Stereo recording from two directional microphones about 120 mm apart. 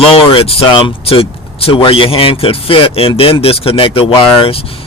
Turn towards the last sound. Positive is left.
turn(degrees=50)  # may be behind; listen again after turning